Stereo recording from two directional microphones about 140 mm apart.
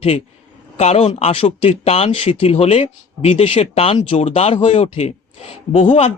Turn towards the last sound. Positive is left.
turn(degrees=50)  # may be behind; listen again after turning